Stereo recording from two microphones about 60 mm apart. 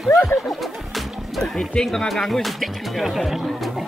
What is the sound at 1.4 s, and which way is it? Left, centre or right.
Speech, centre.